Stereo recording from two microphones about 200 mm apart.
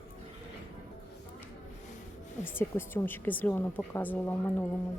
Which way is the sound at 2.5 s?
10° left (ahead or behind).